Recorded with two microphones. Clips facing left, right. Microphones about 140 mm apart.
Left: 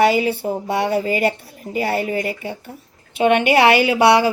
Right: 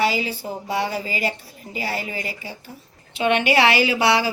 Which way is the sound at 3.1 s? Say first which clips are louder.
Left 4 dB; 50° left (ahead or behind).